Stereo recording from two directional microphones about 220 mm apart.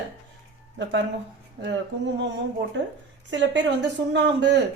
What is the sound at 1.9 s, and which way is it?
A woman's voice, 50° right (ahead or behind).